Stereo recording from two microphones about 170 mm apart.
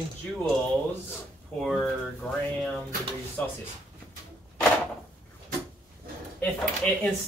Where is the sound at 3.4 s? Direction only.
10° left (ahead or behind).